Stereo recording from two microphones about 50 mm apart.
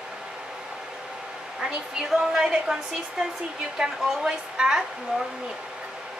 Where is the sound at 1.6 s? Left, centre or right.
Centre.